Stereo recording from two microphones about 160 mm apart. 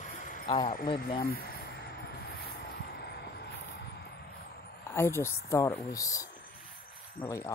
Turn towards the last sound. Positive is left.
turn(degrees=20)  # may be behind; listen again after turning